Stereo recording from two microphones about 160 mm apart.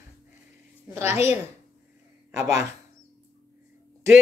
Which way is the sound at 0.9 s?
15° right (ahead or behind).